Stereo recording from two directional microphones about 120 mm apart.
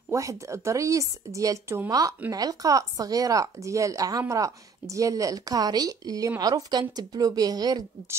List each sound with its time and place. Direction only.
0.1 s a woman's voice: 25° right (ahead or behind)